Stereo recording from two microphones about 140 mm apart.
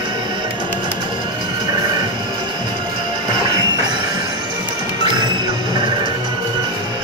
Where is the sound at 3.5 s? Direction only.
25° right (ahead or behind).